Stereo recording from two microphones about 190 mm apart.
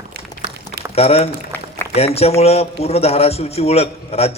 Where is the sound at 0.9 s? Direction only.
30° left (ahead or behind).